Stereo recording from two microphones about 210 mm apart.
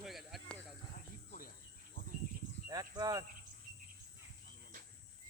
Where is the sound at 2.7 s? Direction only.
15° right (ahead or behind).